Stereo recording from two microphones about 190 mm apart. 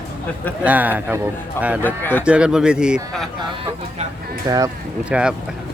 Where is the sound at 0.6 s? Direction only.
10° right (ahead or behind).